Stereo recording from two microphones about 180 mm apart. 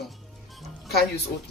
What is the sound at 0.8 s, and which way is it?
Speech, 65° left (ahead or behind).